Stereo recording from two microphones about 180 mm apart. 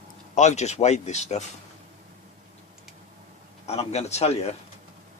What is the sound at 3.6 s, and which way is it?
Speech, 35° left (ahead or behind).